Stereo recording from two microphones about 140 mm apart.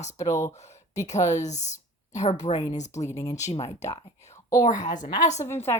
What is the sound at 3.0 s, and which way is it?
Speech, 25° left (ahead or behind).